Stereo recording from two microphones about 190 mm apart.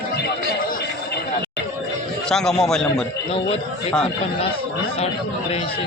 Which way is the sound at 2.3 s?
5° left (ahead or behind).